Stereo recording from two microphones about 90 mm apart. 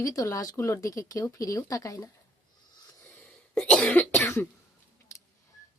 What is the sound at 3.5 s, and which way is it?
Cough, 10° left (ahead or behind).